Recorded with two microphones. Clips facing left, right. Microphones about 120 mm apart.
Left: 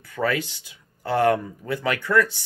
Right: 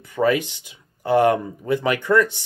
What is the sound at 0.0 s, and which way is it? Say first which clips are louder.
Speech: right 5 dB; 20° right (ahead or behind).